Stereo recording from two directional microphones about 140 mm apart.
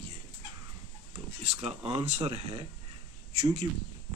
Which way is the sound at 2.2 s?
35° right (ahead or behind).